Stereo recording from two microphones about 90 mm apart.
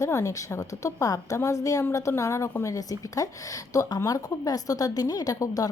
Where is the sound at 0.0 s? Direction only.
35° left (ahead or behind).